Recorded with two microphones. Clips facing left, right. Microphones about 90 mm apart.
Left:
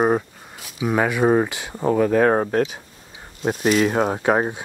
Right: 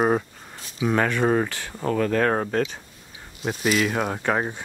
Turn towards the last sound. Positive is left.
turn(degrees=15)  # may be behind; listen again after turning